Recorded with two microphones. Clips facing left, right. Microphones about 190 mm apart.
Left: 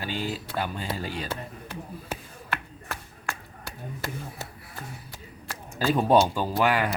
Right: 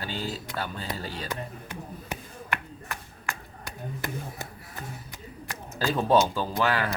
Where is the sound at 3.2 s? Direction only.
20° right (ahead or behind).